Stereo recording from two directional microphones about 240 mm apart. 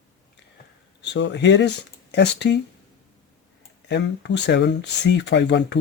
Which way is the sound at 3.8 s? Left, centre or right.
Left.